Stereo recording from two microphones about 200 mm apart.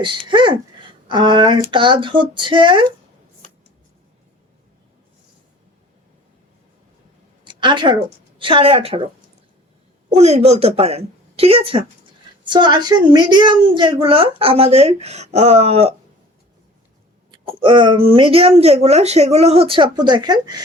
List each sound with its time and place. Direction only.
0.3 s a woman's voice: 25° right (ahead or behind)
3.4 s a sound: 35° left (ahead or behind)
7.4 s a sound: 25° right (ahead or behind)
8.4 s a woman's voice: 25° right (ahead or behind)
10.1 s a woman's voice: 35° right (ahead or behind)
17.6 s a woman's voice: 25° right (ahead or behind)